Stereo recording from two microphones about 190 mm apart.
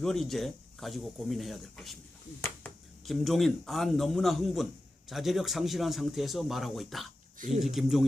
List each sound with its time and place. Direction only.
0.0 s a man's voice: centre (ahead or behind)
3.1 s a man's voice: centre (ahead or behind)
7.3 s speech: 45° right (ahead or behind)
7.6 s a man's voice: centre (ahead or behind)